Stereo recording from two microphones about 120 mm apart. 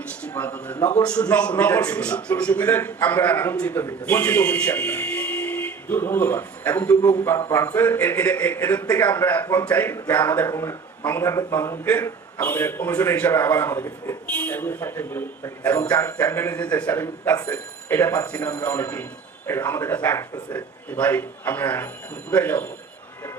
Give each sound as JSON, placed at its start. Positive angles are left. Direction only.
{"t": 0.2, "sound": "a man's voice", "side_deg": 10}
{"t": 0.8, "sound": "a man's voice", "side_deg": 35}
{"t": 1.0, "sound": "a man's voice", "side_deg": 10}